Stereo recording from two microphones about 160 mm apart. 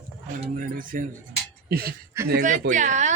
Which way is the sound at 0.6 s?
60° right (ahead or behind).